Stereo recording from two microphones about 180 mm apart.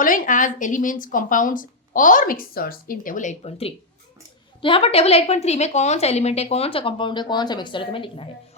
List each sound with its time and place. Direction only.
0.0 s a woman's voice: 45° left (ahead or behind); by 8.3 s 30° left (ahead or behind)